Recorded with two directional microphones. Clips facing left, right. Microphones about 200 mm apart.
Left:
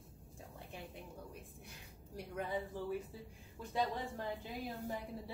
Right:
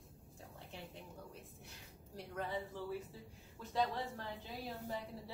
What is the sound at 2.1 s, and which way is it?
Speech, 15° left (ahead or behind).